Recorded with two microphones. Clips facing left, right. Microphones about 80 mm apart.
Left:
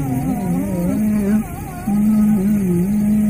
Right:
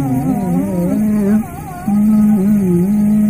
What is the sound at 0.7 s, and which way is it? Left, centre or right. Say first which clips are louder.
Music: right 2 dB; right.